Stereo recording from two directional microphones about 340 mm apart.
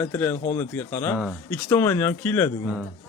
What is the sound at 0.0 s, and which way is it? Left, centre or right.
Speech, centre.